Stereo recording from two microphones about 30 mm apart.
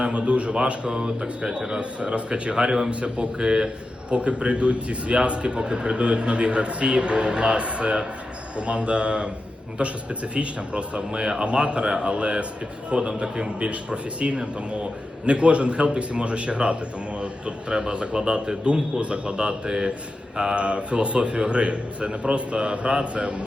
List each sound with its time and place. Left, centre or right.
0.0 s a man's voice: right
0.9 s a man's voice: right
1.8 s speech: right
2.6 s a man's voice: centre
2.9 s a man's voice: right
3.3 s a man's voice: right
4.1 s a man's voice: right
11.4 s a man's voice: right
11.9 s a man's voice: right
12.1 s a man's voice: right
13.7 s a man's voice: right
18.4 s a man's voice: right
20.3 s speech: centre
20.6 s a man's voice: right